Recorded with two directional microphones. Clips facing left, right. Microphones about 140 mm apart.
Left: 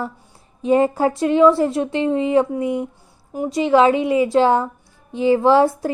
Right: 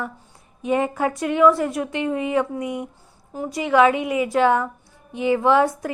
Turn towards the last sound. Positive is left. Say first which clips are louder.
# left 3 dB
turn(degrees=30)  # may be behind; listen again after turning